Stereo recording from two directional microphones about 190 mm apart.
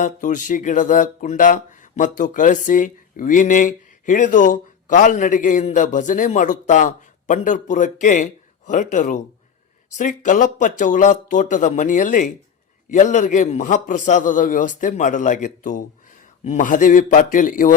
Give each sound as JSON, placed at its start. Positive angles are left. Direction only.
{"t": 0.0, "sound": "a man's voice", "side_deg": 40}